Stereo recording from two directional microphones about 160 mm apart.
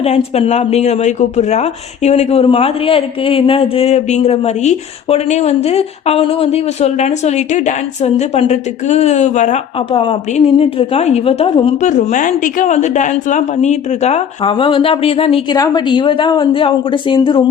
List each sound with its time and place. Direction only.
0.0 s a woman's voice: 40° left (ahead or behind)
9.9 s a man's voice: 35° left (ahead or behind)
11.8 s a woman's voice: 50° left (ahead or behind)
15.5 s a man's voice: 25° left (ahead or behind)